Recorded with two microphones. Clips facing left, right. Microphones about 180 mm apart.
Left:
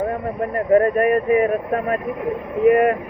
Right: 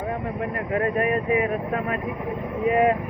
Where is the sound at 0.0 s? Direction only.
45° left (ahead or behind).